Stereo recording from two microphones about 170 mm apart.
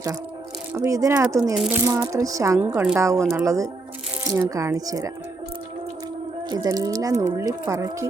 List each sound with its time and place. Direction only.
0.7 s speech: 15° right (ahead or behind)
6.5 s speech: 20° right (ahead or behind)